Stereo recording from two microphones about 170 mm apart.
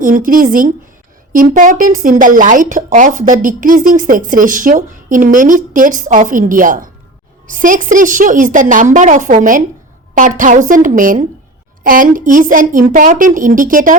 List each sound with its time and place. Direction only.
0.0 s speech: 55° right (ahead or behind)